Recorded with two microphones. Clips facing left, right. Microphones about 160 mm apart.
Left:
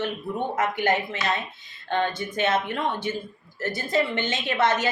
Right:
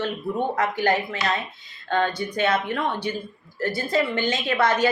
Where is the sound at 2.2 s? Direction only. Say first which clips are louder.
Right 1 dB; 20° left (ahead or behind).